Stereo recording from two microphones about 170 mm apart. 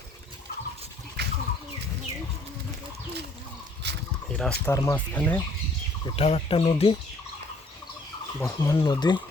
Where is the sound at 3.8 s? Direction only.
80° right.